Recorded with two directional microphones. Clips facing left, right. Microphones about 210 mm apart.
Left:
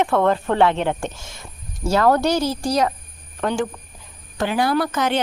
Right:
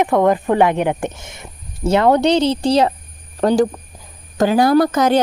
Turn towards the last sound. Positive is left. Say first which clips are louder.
# right 7 dB
turn(degrees=-40)  # may be behind; listen again after turning